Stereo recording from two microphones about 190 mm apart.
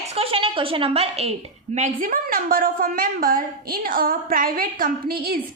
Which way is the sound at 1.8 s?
45° right (ahead or behind).